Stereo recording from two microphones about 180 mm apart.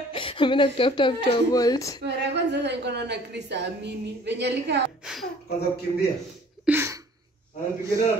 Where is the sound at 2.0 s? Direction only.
70° right (ahead or behind).